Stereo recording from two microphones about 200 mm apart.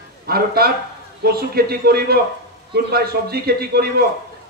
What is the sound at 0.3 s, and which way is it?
A man's voice, 50° right (ahead or behind).